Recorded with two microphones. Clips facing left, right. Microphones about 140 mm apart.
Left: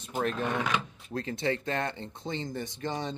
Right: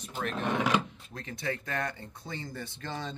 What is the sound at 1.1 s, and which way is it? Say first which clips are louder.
Speech: left 6 dB; 30° left (ahead or behind).